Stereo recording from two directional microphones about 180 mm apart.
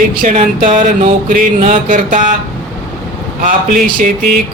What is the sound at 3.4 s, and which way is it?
Speech, 50° right (ahead or behind).